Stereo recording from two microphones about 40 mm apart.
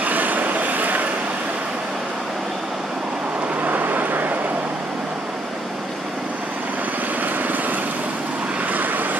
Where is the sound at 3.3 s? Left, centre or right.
Right.